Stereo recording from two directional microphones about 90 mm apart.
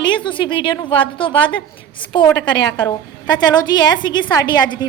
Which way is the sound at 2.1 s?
55° left (ahead or behind).